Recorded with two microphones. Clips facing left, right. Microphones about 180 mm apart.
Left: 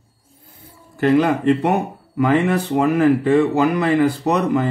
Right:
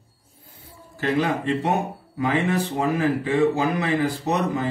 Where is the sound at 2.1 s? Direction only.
65° left (ahead or behind).